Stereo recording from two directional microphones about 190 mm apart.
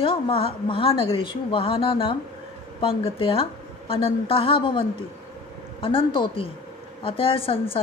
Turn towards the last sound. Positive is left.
turn(degrees=30)  # may be behind; listen again after turning